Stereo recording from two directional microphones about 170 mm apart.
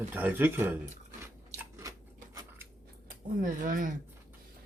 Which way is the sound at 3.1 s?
55° right (ahead or behind).